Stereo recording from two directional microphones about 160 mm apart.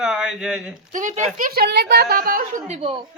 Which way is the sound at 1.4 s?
65° right (ahead or behind).